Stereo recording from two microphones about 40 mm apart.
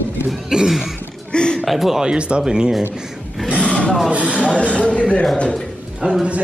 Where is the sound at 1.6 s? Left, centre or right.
Centre.